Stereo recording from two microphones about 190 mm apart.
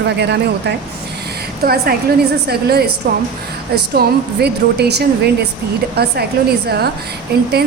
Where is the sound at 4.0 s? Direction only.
60° right (ahead or behind).